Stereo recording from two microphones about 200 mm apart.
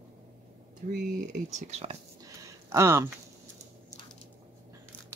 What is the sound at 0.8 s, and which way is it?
Speech, 40° right (ahead or behind).